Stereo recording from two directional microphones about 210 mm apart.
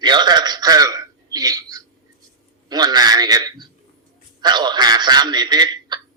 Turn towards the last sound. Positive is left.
turn(degrees=-20)  # may be behind; listen again after turning